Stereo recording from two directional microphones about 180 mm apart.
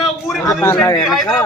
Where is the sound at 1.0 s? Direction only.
Centre (ahead or behind).